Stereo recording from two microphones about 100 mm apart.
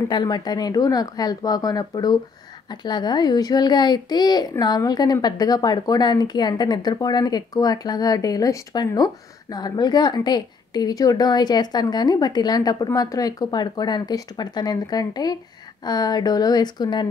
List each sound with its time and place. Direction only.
0.1 s speech: 45° left (ahead or behind)